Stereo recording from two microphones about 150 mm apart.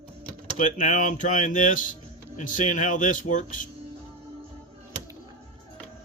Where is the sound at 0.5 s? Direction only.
55° left (ahead or behind).